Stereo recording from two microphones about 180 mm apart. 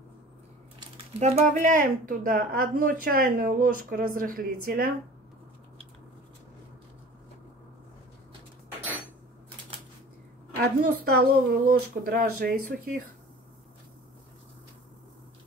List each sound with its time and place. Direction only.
1.2 s a woman's voice: 40° right (ahead or behind)
10.8 s a woman's voice: 55° right (ahead or behind)